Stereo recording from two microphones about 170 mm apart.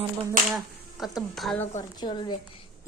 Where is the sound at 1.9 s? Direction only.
25° left (ahead or behind).